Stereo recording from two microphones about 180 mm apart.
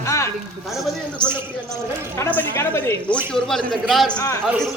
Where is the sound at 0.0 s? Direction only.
15° left (ahead or behind).